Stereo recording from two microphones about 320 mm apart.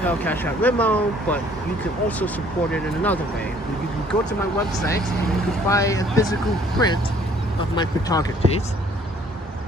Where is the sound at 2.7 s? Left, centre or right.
Centre.